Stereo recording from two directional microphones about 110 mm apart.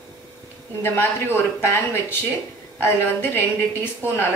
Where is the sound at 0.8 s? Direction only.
20° left (ahead or behind).